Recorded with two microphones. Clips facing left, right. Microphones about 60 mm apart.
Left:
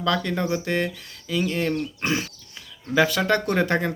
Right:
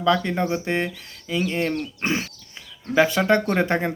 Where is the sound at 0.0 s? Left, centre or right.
Right.